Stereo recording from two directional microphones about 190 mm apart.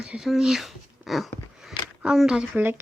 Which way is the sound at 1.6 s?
Centre (ahead or behind).